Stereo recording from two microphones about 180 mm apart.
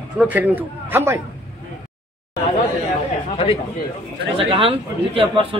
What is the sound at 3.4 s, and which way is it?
Speech, 30° left (ahead or behind).